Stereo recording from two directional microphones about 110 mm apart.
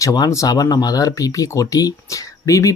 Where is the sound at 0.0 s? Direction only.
30° left (ahead or behind).